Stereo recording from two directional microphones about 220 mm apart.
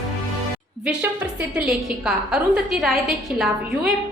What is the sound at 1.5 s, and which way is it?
A woman's voice, 5° right (ahead or behind).